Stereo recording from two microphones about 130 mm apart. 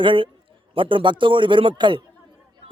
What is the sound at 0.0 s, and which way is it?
A man's voice, 40° right (ahead or behind).